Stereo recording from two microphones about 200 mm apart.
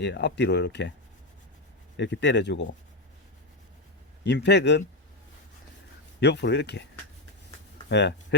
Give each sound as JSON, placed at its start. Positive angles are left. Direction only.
{"t": 0.0, "sound": "speech", "side_deg": 60}
{"t": 2.0, "sound": "speech", "side_deg": 60}
{"t": 4.2, "sound": "speech", "side_deg": 60}
{"t": 6.1, "sound": "speech", "side_deg": 60}
{"t": 7.9, "sound": "speech", "side_deg": 60}